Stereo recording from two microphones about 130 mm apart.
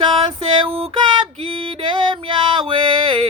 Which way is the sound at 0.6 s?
35° right (ahead or behind).